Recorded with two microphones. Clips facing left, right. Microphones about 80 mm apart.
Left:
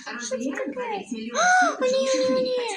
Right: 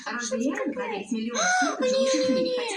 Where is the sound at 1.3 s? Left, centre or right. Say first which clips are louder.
Left 6 dB; left.